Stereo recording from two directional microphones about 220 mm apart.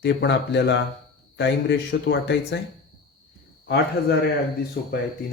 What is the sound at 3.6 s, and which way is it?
Speech, 50° left (ahead or behind).